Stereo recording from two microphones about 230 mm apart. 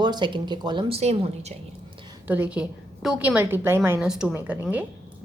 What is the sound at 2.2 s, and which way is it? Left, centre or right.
A woman's voice, centre.